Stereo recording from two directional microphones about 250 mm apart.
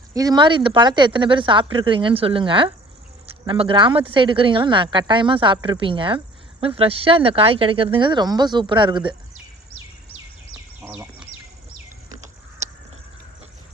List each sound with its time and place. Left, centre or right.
0.1 s speech: centre
10.5 s bird: centre